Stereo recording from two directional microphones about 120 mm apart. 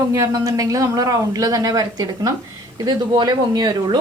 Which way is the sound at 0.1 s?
30° right (ahead or behind).